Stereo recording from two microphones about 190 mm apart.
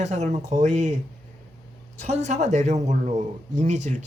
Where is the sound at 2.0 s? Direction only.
35° right (ahead or behind).